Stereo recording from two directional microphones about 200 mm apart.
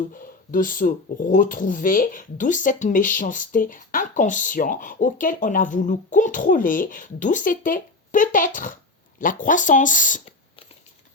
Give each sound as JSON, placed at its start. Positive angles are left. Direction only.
{"t": 0.1, "sound": "speech", "side_deg": 45}